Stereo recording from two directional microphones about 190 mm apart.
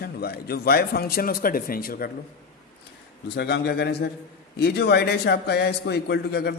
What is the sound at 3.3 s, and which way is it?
A man's voice, 60° left (ahead or behind).